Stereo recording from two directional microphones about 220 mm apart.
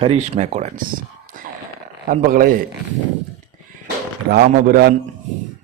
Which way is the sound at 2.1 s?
40° right (ahead or behind).